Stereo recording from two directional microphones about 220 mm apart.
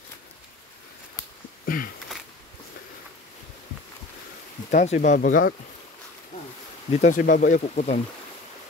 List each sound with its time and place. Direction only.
1.7 s a sound: 40° left (ahead or behind)
4.6 s speech: 35° left (ahead or behind)
6.9 s speech: 35° left (ahead or behind)